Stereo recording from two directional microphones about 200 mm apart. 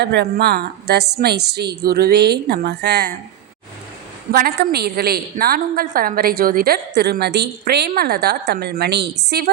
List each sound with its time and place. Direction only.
0.0 s a woman's voice: 55° right (ahead or behind)
4.3 s a woman's voice: 50° right (ahead or behind)